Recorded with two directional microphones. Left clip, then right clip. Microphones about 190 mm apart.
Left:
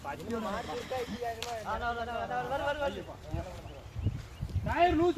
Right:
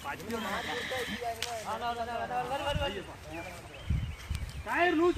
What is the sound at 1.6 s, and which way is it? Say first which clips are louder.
Speech: left 1 dB; 30° right (ahead or behind).